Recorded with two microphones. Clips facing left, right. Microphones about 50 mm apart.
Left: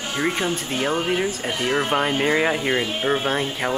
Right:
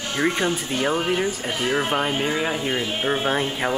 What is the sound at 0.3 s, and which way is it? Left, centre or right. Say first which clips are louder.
Speech: right 1 dB; centre.